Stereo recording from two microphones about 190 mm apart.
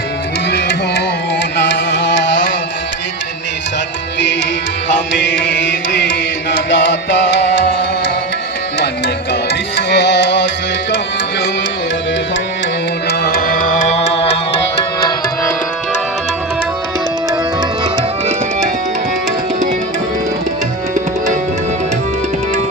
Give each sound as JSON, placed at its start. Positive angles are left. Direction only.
{"t": 0.5, "sound": "music", "side_deg": 60}
{"t": 5.3, "sound": "music", "side_deg": 70}
{"t": 9.5, "sound": "music", "side_deg": 65}
{"t": 13.1, "sound": "music", "side_deg": 55}